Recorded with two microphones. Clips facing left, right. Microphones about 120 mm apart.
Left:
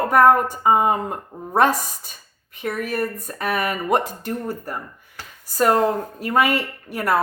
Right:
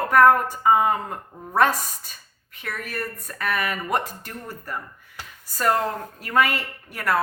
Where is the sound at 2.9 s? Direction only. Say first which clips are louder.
Left 7 dB; 40° left (ahead or behind).